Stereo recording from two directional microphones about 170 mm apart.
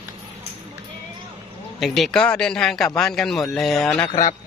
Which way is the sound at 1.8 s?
Centre (ahead or behind).